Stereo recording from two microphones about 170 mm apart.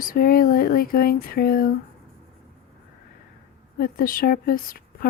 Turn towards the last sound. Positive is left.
turn(degrees=55)  # may be behind; listen again after turning